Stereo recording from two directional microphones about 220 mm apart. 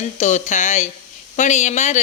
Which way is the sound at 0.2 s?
35° left (ahead or behind).